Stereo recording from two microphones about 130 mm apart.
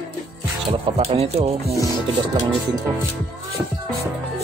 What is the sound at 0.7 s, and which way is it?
Speech, 50° right (ahead or behind).